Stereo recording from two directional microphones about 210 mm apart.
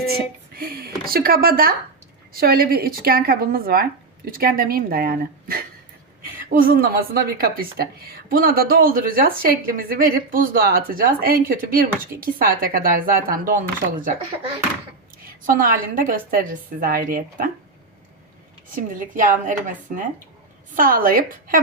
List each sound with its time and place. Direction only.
0.5 s a woman's voice: 45° right (ahead or behind)
15.4 s a woman's voice: 40° right (ahead or behind)
18.8 s a woman's voice: 40° right (ahead or behind)
20.7 s a woman's voice: 40° right (ahead or behind)